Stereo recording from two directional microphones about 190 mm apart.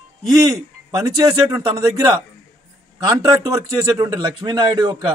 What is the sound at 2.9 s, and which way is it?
A man's voice, 20° right (ahead or behind).